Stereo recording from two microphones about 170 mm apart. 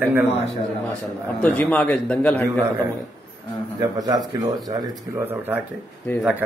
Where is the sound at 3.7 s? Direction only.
20° right (ahead or behind).